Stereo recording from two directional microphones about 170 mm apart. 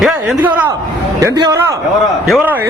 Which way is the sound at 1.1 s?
20° right (ahead or behind).